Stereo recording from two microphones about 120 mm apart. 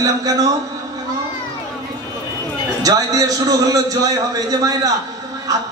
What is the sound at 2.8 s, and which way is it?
A man's voice, 30° right (ahead or behind).